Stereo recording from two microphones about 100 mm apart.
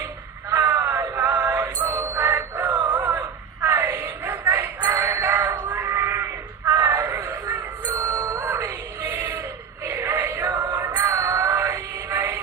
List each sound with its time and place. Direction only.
0.5 s a sound: 25° right (ahead or behind)
1.1 s music: 20° right (ahead or behind)
2.6 s music: 45° right (ahead or behind)
3.1 s wail: 30° right (ahead or behind)
4.2 s music: 20° right (ahead or behind)
9.8 s a sound: 25° right (ahead or behind)
10.9 s music: 25° right (ahead or behind)